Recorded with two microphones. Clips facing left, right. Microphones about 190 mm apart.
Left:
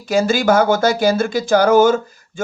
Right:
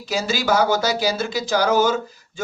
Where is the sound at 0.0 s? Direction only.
50° left (ahead or behind).